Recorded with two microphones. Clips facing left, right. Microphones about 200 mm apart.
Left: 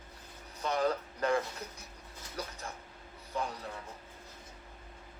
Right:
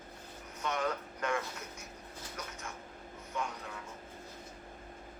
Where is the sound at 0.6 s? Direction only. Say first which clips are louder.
Left 4 dB; 35° left (ahead or behind).